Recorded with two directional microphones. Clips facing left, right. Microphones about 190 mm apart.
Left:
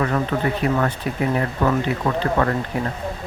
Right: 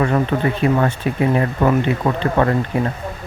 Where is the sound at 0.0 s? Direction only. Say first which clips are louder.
Right 4 dB; 25° right (ahead or behind).